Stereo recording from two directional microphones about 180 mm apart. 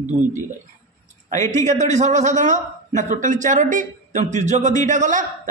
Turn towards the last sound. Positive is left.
turn(degrees=-45)  # may be behind; listen again after turning